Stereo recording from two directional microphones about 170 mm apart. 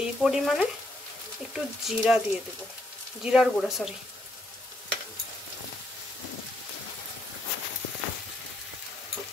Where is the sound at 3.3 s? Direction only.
5° right (ahead or behind).